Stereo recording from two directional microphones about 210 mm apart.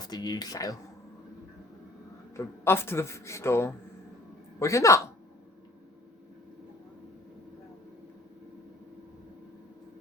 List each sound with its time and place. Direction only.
0.0 s speech: 20° left (ahead or behind)
2.3 s speech: 10° left (ahead or behind)